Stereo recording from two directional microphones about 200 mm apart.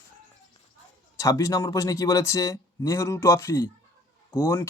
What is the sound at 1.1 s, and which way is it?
Speech, 15° left (ahead or behind).